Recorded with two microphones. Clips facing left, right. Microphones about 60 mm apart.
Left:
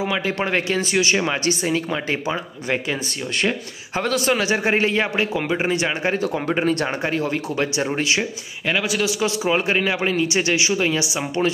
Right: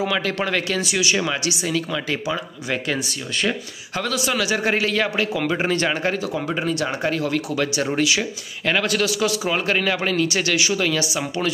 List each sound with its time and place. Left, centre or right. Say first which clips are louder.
0.0 s a man's voice: even; left
4.1 s a man's voice: left 2 dB; left
5.5 s speech: even; centre
6.1 s speech: left 3 dB; left
7.0 s a man's voice: even; left
8.6 s speech: right 1 dB; centre
9.0 s a man's voice: even; left